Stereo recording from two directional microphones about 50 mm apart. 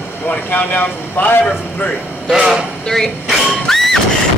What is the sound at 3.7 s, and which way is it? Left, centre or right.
Horse, centre.